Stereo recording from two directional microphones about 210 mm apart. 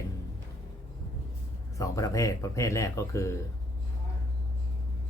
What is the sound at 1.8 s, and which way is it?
Speech, 15° left (ahead or behind).